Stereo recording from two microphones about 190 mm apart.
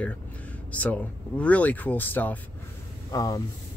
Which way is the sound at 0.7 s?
5° left (ahead or behind).